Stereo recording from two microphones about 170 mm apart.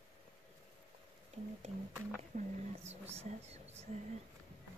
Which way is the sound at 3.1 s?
40° right (ahead or behind).